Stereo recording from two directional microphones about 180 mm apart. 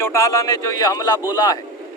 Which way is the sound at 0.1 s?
15° left (ahead or behind).